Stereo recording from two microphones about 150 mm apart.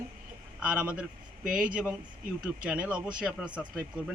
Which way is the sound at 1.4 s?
65° right (ahead or behind).